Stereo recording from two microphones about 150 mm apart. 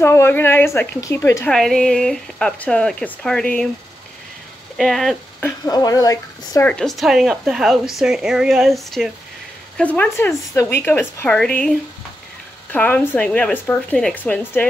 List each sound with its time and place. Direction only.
0.0 s speech: 15° left (ahead or behind)
1.5 s speech: 5° left (ahead or behind)
4.7 s speech: centre (ahead or behind)
5.7 s speech: 25° left (ahead or behind)
6.6 s speech: 5° left (ahead or behind)